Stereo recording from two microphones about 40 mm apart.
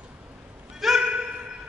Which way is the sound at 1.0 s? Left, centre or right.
Right.